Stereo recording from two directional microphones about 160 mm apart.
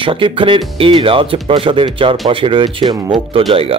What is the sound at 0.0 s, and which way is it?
Speech, 35° right (ahead or behind).